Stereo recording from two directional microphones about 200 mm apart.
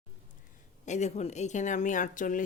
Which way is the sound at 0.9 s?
35° left (ahead or behind).